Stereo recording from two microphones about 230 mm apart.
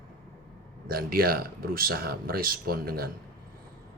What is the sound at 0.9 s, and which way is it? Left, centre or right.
Speech, right.